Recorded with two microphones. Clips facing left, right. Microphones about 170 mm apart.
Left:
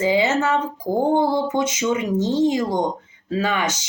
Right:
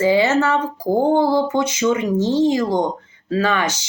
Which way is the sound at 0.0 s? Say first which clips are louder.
Right 3 dB; 20° left (ahead or behind).